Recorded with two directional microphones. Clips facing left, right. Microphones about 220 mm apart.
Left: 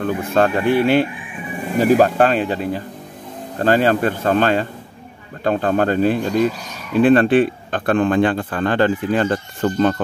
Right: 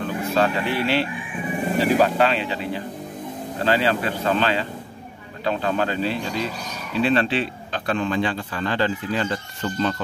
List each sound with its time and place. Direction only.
0.0 s speech: 50° left (ahead or behind)